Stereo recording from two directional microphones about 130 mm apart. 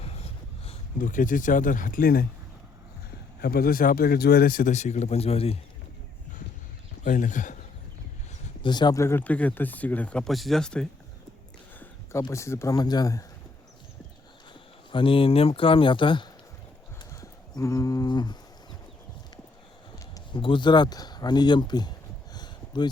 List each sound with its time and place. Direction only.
0.0 s a sound: 50° left (ahead or behind)
0.9 s speech: 90° left
3.8 s speech: 90° left; by 5.5 s 50° left (ahead or behind)
7.0 s speech: 75° left (ahead or behind)
8.6 s speech: 35° left (ahead or behind)
9.0 s speech: 20° left (ahead or behind)
11.8 s speech: 20° left (ahead or behind)
14.9 s speech: 40° left (ahead or behind)
17.0 s a sound: 25° left (ahead or behind)
20.3 s speech: 40° left (ahead or behind)